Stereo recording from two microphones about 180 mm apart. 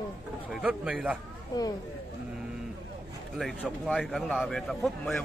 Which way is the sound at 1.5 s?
20° left (ahead or behind).